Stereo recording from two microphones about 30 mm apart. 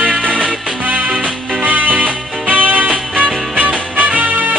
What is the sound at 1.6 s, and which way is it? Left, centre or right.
Music, right.